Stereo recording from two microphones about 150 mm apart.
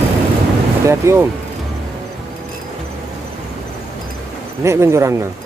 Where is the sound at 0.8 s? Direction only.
20° right (ahead or behind).